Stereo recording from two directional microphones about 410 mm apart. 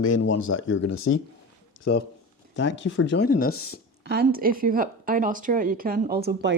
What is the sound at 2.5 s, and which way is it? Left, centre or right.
Speech, left.